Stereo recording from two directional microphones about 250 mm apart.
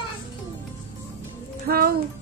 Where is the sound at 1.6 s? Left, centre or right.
Right.